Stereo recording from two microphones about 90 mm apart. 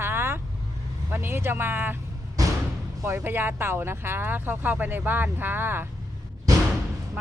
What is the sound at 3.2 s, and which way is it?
Speech, 25° right (ahead or behind).